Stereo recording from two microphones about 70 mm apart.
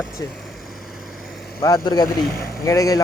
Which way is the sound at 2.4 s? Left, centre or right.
Left.